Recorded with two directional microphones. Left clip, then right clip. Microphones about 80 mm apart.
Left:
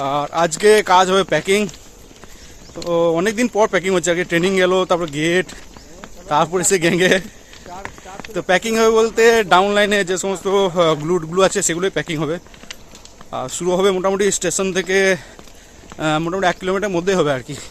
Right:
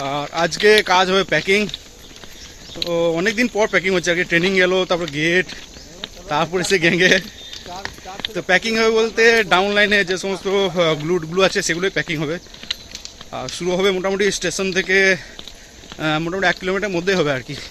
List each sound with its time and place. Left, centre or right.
0.0 s speech: left
0.6 s speech: left
2.7 s speech: left
8.4 s speech: left
11.0 s speech: centre
11.3 s speech: left
13.6 s speech: left
17.2 s speech: left